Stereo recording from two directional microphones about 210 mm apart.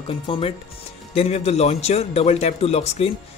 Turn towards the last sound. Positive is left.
turn(degrees=30)  # may be behind; listen again after turning